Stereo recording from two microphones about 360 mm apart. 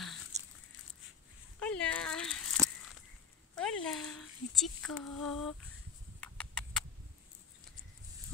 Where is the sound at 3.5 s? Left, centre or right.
Centre.